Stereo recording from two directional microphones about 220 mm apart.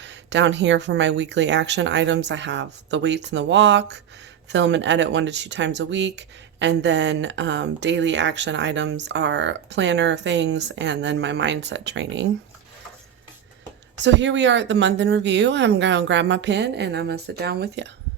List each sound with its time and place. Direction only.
0.0 s speech: 55° right (ahead or behind)
14.0 s speech: 55° right (ahead or behind)